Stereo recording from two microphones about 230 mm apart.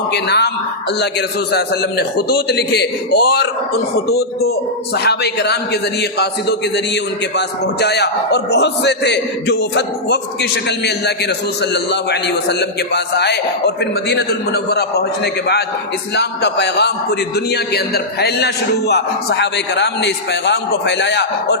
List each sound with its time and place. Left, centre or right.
0.1 s a man's voice: left
1.5 s a man's voice: left